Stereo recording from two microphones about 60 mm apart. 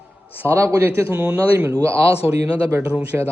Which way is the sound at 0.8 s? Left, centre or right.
Right.